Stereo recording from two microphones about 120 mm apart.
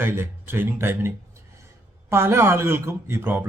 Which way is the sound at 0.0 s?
20° right (ahead or behind).